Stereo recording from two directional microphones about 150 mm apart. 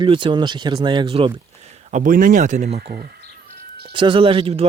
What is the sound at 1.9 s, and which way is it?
Speech, 65° right (ahead or behind).